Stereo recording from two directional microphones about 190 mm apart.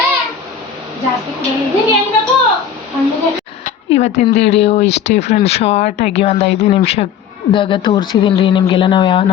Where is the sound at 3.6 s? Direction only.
35° left (ahead or behind).